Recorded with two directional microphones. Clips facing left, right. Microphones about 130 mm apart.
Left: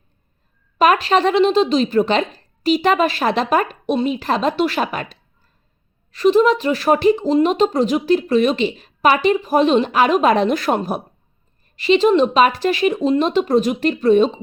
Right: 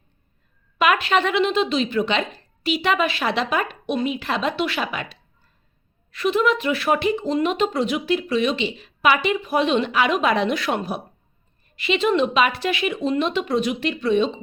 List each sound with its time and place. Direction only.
0.8 s speech: 35° left (ahead or behind)
6.1 s speech: 35° left (ahead or behind)